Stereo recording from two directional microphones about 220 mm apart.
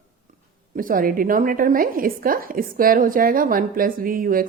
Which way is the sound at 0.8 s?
40° right (ahead or behind).